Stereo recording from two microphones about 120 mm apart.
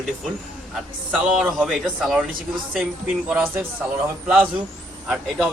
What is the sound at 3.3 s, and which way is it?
Speech, 15° right (ahead or behind).